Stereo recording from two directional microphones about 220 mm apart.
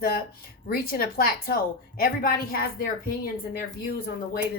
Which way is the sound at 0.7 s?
45° left (ahead or behind).